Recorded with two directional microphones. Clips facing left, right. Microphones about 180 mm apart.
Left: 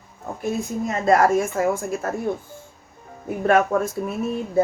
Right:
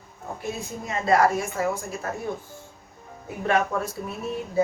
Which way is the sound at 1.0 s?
45° left (ahead or behind).